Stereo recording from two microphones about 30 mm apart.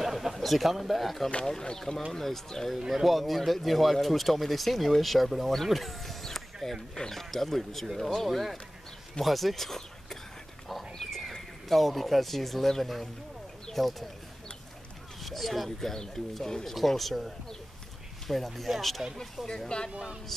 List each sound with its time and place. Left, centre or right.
0.0 s a sound: centre
1.6 s speech: left
2.1 s speech: centre
2.9 s speech: centre
11.0 s horse: centre
11.7 s speech: centre
15.2 s speech: centre
16.7 s speech: centre
19.4 s speech: centre